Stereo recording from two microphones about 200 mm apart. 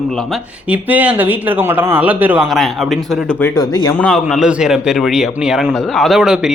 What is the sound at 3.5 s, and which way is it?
Speech, 20° left (ahead or behind).